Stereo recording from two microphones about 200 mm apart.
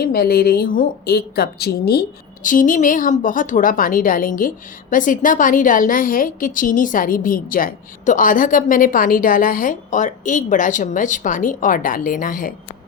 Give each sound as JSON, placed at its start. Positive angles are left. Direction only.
{"t": 0.0, "sound": "a woman's voice", "side_deg": 50}